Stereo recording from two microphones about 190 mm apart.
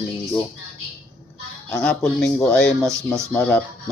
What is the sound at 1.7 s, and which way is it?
Speech, 5° left (ahead or behind).